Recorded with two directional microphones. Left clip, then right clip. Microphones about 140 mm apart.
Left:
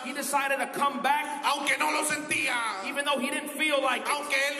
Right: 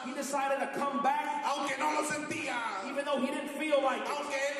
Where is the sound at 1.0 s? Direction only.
30° left (ahead or behind).